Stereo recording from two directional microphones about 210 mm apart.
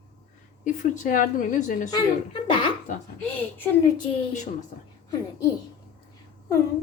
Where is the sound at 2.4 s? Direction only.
25° left (ahead or behind).